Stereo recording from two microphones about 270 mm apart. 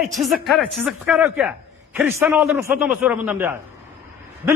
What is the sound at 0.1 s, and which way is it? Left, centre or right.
A woman's voice, centre.